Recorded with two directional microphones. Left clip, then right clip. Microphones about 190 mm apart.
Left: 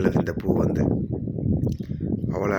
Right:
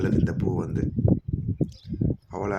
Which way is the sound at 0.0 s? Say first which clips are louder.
Left 3 dB; 10° left (ahead or behind).